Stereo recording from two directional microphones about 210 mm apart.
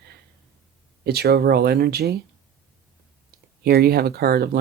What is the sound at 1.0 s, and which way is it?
Speech, 50° right (ahead or behind).